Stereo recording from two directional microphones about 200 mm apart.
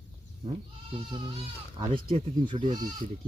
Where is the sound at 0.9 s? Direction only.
25° right (ahead or behind).